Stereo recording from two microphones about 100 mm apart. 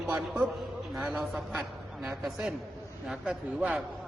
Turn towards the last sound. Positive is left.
turn(degrees=-10)  # may be behind; listen again after turning